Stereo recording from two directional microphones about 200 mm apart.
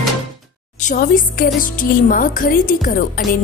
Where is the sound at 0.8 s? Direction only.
45° left (ahead or behind).